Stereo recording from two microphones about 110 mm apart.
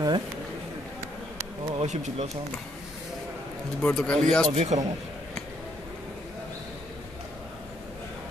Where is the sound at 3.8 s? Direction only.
5° left (ahead or behind).